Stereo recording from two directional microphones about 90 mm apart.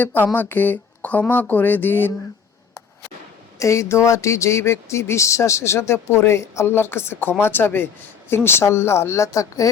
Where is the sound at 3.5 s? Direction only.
35° left (ahead or behind).